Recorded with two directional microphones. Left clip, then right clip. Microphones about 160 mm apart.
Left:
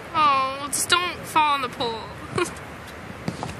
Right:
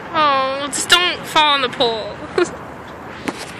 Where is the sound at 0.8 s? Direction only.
30° left (ahead or behind).